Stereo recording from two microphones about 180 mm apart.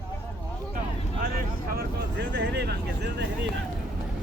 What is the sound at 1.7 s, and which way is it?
Vehicle, 65° right (ahead or behind).